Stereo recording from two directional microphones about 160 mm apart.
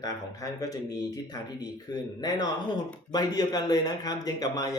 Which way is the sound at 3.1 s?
25° left (ahead or behind).